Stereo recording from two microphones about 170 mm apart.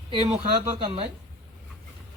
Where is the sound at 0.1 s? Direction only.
35° right (ahead or behind).